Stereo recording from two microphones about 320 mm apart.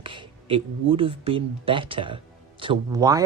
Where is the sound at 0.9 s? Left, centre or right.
Centre.